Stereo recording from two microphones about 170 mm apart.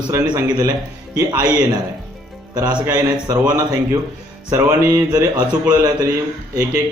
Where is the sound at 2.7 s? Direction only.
10° right (ahead or behind).